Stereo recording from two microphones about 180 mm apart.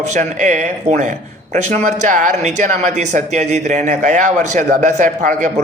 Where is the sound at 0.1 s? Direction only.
45° right (ahead or behind).